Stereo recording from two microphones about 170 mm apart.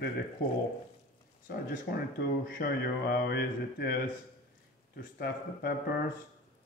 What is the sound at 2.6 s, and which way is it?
Speech, 65° left (ahead or behind).